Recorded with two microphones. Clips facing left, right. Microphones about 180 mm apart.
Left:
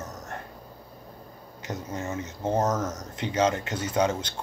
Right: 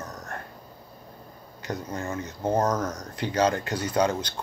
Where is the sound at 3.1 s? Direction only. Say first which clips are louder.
Right 1 dB; 25° left (ahead or behind).